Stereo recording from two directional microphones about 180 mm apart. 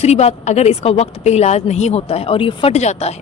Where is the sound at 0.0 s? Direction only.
35° left (ahead or behind).